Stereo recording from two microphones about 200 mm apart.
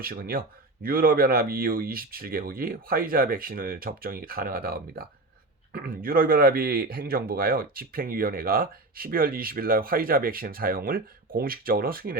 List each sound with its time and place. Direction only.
0.0 s speech: 45° right (ahead or behind)